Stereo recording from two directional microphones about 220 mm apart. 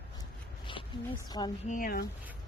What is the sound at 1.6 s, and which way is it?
Speech, 40° left (ahead or behind).